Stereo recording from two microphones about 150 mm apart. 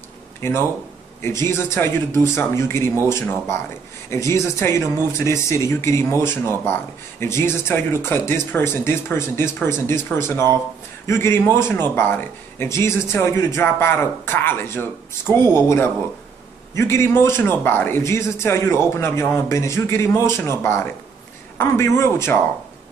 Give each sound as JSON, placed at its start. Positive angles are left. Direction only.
{"t": 0.4, "sound": "a man's voice", "side_deg": 15}
{"t": 16.7, "sound": "a man's voice", "side_deg": 15}